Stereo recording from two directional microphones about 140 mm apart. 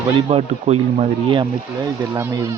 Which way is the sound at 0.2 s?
45° right (ahead or behind).